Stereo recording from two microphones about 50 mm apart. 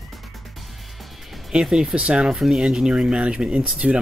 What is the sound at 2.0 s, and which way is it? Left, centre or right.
Speech, right.